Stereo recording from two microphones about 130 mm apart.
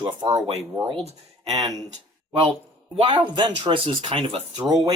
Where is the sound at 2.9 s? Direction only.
45° right (ahead or behind).